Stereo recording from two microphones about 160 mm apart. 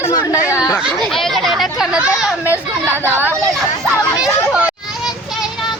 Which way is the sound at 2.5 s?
15° right (ahead or behind).